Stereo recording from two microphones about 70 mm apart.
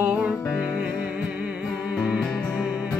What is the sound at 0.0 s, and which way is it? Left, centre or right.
Music, centre.